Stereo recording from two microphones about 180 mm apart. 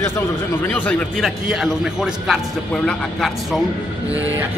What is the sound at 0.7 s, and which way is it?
A man's voice, 10° left (ahead or behind).